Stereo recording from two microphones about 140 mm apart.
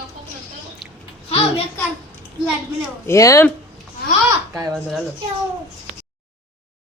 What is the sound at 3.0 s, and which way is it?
Speech, 20° left (ahead or behind).